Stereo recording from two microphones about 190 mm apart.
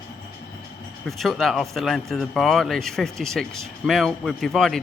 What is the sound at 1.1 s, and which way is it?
Speech, centre (ahead or behind).